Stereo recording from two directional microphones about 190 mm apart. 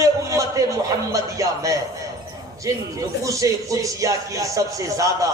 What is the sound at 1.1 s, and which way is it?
Speech, 15° right (ahead or behind).